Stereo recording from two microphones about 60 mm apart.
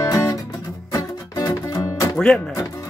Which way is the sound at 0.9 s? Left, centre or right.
Left.